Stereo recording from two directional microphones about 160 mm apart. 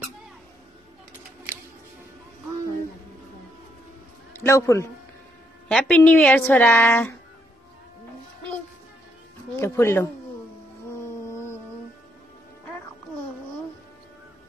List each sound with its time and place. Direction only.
4.3 s a man's voice: 15° left (ahead or behind)
5.7 s a woman's voice: 5° left (ahead or behind)
9.6 s a woman's voice: 15° left (ahead or behind)
11.2 s music: 15° left (ahead or behind)